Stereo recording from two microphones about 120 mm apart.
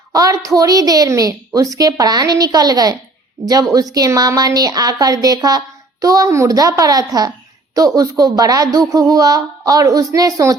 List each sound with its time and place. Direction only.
0.1 s a woman's voice: 30° right (ahead or behind)